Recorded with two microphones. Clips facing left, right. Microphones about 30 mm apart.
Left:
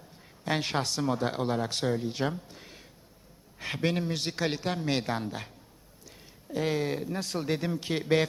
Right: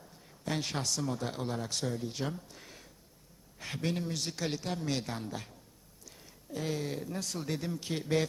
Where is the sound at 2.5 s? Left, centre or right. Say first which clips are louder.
Left 3 dB; left.